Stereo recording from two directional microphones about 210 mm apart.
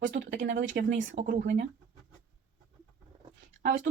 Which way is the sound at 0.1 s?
55° right (ahead or behind).